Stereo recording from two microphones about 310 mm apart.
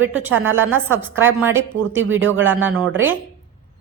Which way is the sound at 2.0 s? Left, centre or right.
Right.